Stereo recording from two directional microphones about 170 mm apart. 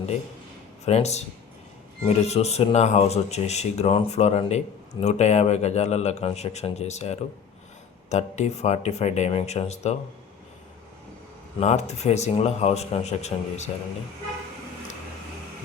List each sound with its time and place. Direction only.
0.9 s speech: 40° left (ahead or behind)
11.6 s speech: 40° left (ahead or behind)